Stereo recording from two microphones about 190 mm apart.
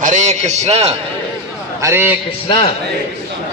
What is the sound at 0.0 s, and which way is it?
Speech, 40° right (ahead or behind).